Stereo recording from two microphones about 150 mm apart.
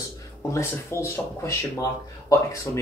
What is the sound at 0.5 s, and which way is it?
Speech, 20° left (ahead or behind).